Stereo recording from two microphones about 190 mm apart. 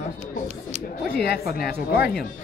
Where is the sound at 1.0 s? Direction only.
55° left (ahead or behind).